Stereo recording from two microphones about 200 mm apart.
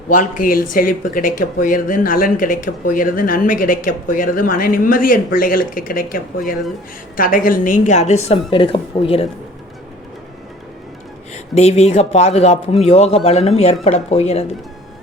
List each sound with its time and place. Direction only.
0.1 s a woman's voice: 40° left (ahead or behind)
11.5 s a woman's voice: 30° left (ahead or behind)